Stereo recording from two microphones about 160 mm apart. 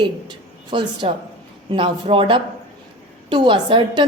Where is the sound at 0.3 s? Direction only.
30° right (ahead or behind).